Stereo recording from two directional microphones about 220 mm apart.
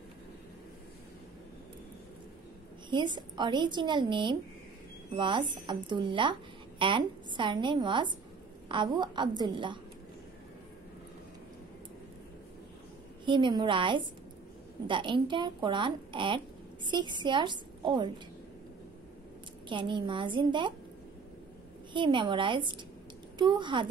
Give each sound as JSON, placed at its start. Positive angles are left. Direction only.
{"t": 2.9, "sound": "a woman's voice", "side_deg": -20}
{"t": 13.2, "sound": "a woman's voice", "side_deg": -20}
{"t": 19.7, "sound": "a woman's voice", "side_deg": -20}
{"t": 21.9, "sound": "a woman's voice", "side_deg": -20}